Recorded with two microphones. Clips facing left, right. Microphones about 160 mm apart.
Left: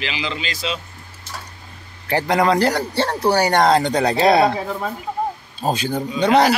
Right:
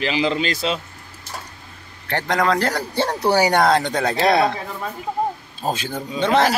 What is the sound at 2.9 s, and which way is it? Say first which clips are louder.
Speech: left 1 dB; 15° right (ahead or behind).